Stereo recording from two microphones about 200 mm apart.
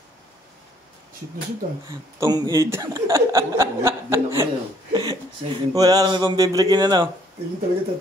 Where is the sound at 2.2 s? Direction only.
20° right (ahead or behind).